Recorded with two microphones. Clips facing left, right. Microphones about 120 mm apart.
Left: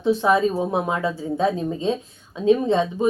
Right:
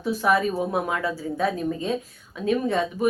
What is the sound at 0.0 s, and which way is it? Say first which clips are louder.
A woman's voice: left 4 dB; 25° left (ahead or behind).